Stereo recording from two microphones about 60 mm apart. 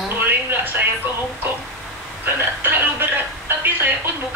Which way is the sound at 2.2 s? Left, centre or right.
Right.